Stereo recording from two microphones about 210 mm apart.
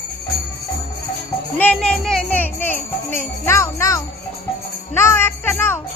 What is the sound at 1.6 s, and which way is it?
Music, 5° left (ahead or behind).